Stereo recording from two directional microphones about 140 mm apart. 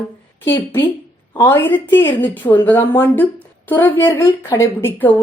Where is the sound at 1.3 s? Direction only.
15° left (ahead or behind).